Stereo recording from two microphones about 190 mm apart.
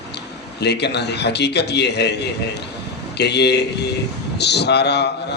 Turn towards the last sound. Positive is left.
turn(degrees=60)  # may be behind; listen again after turning